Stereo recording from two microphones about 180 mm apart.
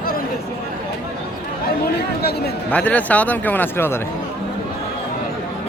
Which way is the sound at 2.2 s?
60° left (ahead or behind).